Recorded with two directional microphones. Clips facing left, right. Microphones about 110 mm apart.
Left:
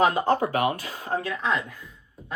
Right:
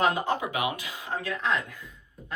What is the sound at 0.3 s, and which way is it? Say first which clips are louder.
Speech: left 6 dB; 45° left (ahead or behind).